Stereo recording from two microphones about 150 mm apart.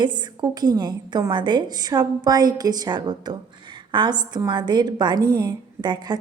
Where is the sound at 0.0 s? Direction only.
30° right (ahead or behind).